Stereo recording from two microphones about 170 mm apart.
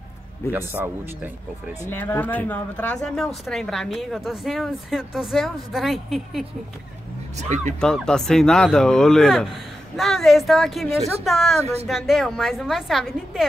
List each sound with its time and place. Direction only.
0.5 s speech: 10° right (ahead or behind)
1.9 s a woman's voice: 10° left (ahead or behind)
7.3 s speech: 45° right (ahead or behind)
7.8 s a woman's voice: 5° left (ahead or behind)
11.6 s speech: 35° right (ahead or behind)
11.9 s a woman's voice: centre (ahead or behind)